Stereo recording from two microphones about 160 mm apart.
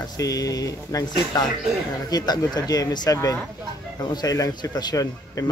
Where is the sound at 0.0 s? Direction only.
20° left (ahead or behind).